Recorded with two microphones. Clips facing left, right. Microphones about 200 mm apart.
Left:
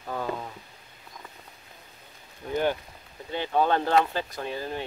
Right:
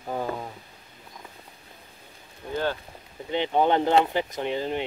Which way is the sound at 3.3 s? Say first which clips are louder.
Right 2 dB; 20° right (ahead or behind).